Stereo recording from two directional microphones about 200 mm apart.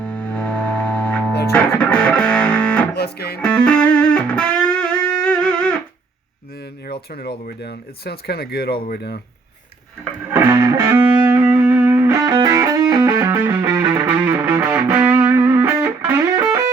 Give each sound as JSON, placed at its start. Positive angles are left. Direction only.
{"t": 0.0, "sound": "music", "side_deg": 5}
{"t": 2.9, "sound": "speech", "side_deg": 55}
{"t": 3.4, "sound": "music", "side_deg": 5}
{"t": 7.1, "sound": "speech", "side_deg": 50}
{"t": 10.3, "sound": "music", "side_deg": -15}